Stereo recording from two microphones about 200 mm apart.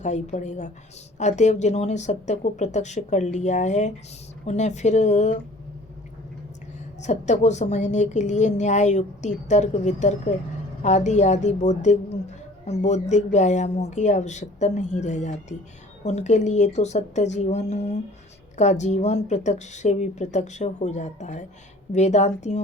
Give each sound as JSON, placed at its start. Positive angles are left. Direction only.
{"t": 0.0, "sound": "speech", "side_deg": 35}
{"t": 7.0, "sound": "speech", "side_deg": 35}